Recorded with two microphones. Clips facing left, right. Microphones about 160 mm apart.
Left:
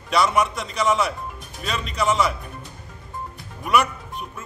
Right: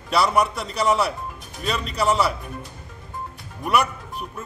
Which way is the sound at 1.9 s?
35° right (ahead or behind).